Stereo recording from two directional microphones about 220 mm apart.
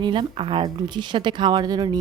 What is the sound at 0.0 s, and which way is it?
A woman's voice, 20° right (ahead or behind).